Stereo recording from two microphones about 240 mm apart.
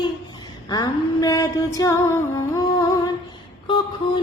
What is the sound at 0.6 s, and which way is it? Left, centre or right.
Female singing, centre.